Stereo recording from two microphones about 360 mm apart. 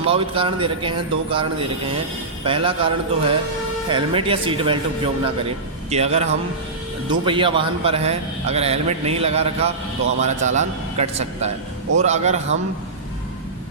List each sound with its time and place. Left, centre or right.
0.0 s a man's voice: centre
5.9 s a man's voice: centre
7.3 s a man's voice: centre